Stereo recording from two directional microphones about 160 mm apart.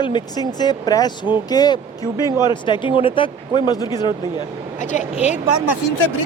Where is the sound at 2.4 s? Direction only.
30° left (ahead or behind).